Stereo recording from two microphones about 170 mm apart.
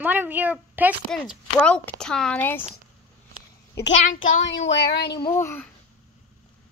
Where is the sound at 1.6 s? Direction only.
10° left (ahead or behind).